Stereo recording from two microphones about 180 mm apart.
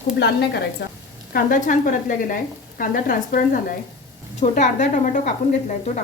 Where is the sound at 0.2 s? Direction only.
65° left (ahead or behind).